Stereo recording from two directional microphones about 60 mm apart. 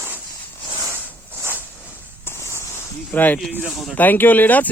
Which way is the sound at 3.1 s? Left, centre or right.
Left.